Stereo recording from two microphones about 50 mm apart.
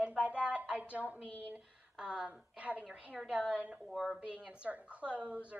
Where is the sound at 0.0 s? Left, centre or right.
Right.